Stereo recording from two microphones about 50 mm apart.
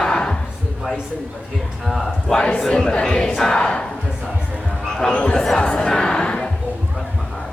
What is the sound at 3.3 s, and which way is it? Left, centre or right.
Battle cry, centre.